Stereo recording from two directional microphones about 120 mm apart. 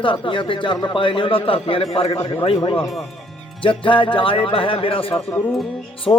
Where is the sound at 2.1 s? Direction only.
30° left (ahead or behind).